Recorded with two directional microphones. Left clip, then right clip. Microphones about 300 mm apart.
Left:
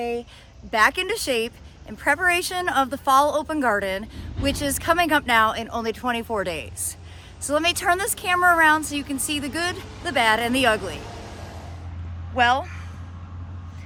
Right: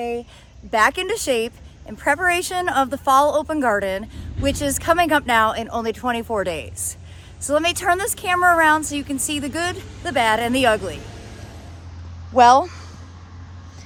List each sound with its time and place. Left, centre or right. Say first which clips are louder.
0.0 s speech: right 1 dB; centre
11.0 s vehicle: left 2 dB; centre
12.4 s speech: right 8 dB; centre